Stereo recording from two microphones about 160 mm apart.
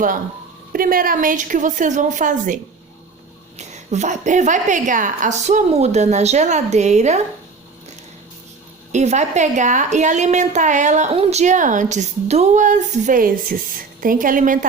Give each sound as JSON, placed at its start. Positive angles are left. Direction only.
{"t": 0.7, "sound": "a woman's voice", "side_deg": -65}
{"t": 3.6, "sound": "a woman's voice", "side_deg": -45}
{"t": 8.9, "sound": "a woman's voice", "side_deg": -45}